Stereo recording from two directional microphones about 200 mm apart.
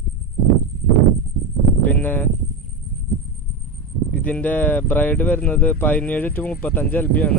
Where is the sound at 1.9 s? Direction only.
10° left (ahead or behind).